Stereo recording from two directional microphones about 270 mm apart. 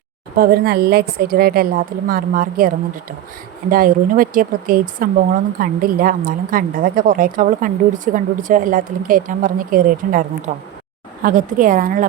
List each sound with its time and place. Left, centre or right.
0.3 s speech: right